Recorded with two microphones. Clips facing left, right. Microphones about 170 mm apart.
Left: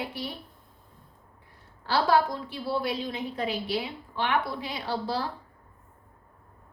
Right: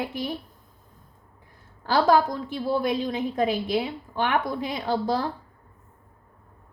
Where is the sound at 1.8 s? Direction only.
45° right (ahead or behind).